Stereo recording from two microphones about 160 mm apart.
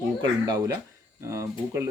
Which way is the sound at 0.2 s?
25° right (ahead or behind).